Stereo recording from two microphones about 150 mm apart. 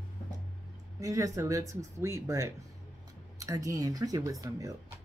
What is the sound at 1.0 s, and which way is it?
Speech, 20° right (ahead or behind).